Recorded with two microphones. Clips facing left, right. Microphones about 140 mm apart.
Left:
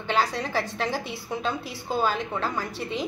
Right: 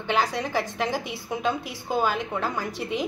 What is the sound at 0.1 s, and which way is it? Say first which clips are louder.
A woman's voice: right 1 dB; 15° right (ahead or behind).